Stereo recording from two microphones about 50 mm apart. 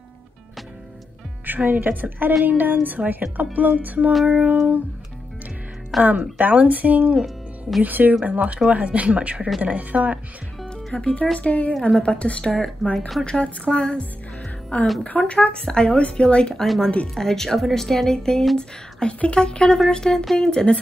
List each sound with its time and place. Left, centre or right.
1.4 s a woman's voice: right
5.9 s a woman's voice: centre
6.3 s a woman's voice: right
10.9 s speech: left
12.8 s a woman's voice: centre
13.2 s a woman's voice: centre
15.0 s speech: left
16.6 s a woman's voice: centre